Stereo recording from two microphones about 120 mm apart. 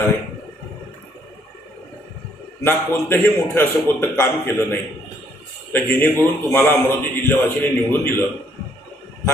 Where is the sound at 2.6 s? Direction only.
20° left (ahead or behind).